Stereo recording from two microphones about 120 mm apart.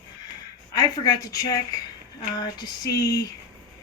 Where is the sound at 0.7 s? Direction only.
35° left (ahead or behind).